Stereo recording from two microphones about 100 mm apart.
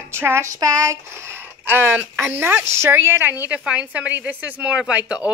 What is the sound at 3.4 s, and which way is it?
Speech, 10° right (ahead or behind).